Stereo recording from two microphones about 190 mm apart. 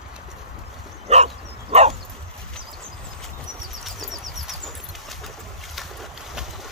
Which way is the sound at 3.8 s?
Centre (ahead or behind).